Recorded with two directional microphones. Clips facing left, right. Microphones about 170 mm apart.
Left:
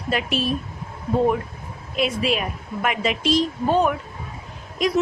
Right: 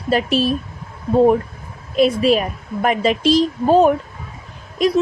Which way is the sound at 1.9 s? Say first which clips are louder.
Right 8 dB; 40° right (ahead or behind).